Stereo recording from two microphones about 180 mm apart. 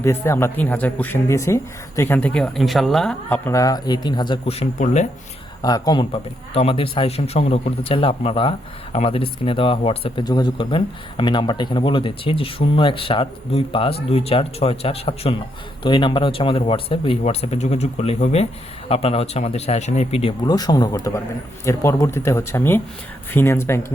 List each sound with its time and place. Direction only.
0.0 s speech: 15° left (ahead or behind)
3.2 s speech: 15° left (ahead or behind); by 5.0 s 35° left (ahead or behind)
5.6 s a man's voice: 20° left (ahead or behind)
20.5 s speech: 20° left (ahead or behind)